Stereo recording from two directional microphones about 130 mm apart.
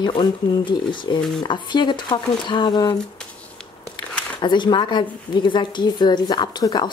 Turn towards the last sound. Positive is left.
turn(degrees=35)  # may be behind; listen again after turning